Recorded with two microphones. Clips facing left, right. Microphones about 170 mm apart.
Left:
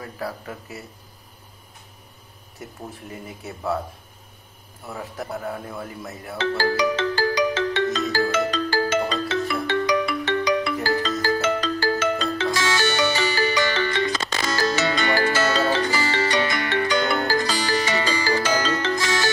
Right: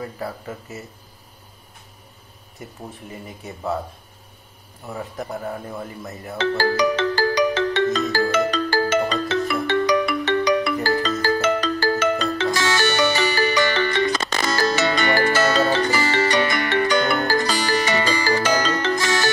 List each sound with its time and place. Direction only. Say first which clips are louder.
0.2 s speech: right 1 dB; centre (ahead or behind)
2.9 s speech: even; centre (ahead or behind)
5.2 s speech: even; centre (ahead or behind)
6.5 s music: right 2 dB; 60° right (ahead or behind)